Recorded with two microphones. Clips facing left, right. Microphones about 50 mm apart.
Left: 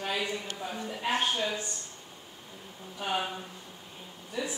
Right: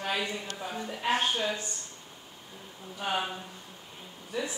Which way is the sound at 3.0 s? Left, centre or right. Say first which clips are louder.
Even; centre.